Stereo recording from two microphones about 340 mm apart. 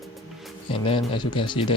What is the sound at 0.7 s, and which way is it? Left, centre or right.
Speech, centre.